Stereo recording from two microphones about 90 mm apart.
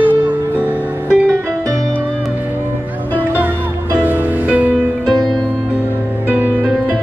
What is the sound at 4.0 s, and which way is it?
Music, 20° right (ahead or behind).